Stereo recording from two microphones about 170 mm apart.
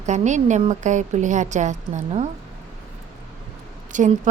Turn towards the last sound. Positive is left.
turn(degrees=-45)  # may be behind; listen again after turning